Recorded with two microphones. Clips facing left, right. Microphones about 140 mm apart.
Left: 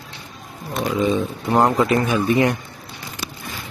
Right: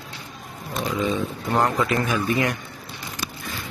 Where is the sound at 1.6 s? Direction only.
25° left (ahead or behind).